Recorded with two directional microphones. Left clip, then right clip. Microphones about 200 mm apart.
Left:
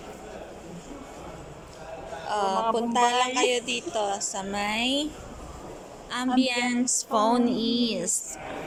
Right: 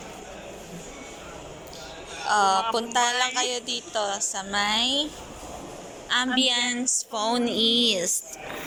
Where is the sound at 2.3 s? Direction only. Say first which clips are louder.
Right 4 dB; 10° left (ahead or behind).